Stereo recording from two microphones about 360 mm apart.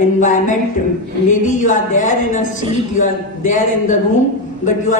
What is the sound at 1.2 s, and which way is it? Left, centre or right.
A woman's voice, left.